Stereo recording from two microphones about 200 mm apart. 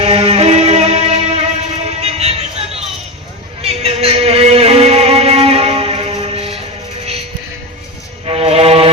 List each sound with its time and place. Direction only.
0.0 s music: 30° right (ahead or behind)
8.2 s music: 30° right (ahead or behind)